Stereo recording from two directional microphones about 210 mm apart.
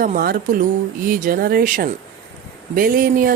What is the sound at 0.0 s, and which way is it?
A woman's voice, 45° right (ahead or behind).